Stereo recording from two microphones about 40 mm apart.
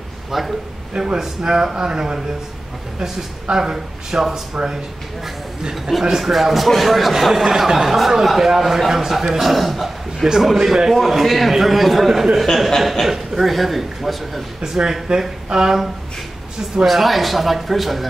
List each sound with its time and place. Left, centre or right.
0.9 s speech: centre
4.6 s speech: right
6.1 s speech: centre
13.0 s speech: centre
14.6 s speech: centre
16.7 s speech: centre